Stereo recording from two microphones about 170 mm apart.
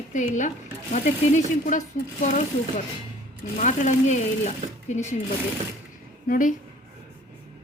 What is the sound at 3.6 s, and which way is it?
A woman's voice, 45° left (ahead or behind).